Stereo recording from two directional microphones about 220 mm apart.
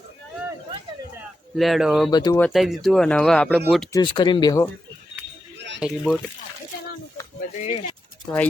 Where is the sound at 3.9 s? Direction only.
20° left (ahead or behind).